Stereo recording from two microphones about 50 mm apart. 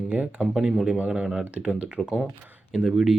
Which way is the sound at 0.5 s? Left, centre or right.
Centre.